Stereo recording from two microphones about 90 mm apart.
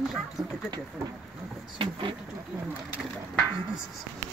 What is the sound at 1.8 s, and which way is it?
Speech, 65° right (ahead or behind).